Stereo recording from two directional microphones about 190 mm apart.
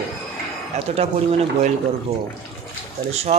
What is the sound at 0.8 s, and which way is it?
Speech, 35° right (ahead or behind).